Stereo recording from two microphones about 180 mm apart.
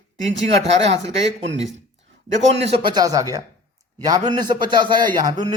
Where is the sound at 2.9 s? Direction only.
20° right (ahead or behind).